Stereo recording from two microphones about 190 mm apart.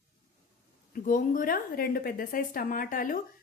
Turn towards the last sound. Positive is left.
turn(degrees=45)  # may be behind; listen again after turning